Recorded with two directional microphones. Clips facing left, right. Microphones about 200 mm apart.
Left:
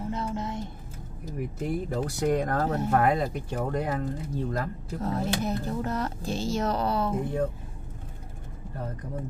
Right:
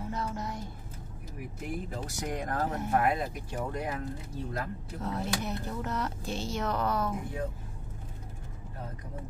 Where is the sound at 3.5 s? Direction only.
55° left (ahead or behind).